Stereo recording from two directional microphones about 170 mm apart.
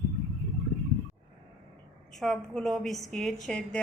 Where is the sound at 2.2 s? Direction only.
Centre (ahead or behind).